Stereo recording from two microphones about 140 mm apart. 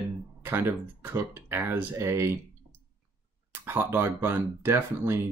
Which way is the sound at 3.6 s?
15° right (ahead or behind).